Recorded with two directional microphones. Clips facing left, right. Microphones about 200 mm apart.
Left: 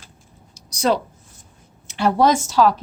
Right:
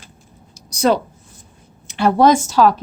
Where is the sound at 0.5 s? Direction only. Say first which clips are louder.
Right 3 dB; 50° right (ahead or behind).